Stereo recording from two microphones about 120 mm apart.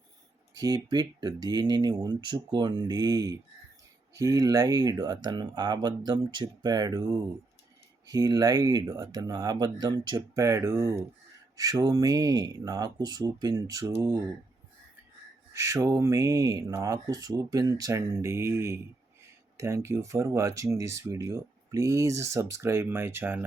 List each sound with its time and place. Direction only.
0.5 s speech: 30° right (ahead or behind)
15.5 s speech: 25° right (ahead or behind)